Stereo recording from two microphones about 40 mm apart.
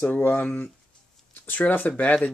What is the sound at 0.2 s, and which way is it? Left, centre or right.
Speech, left.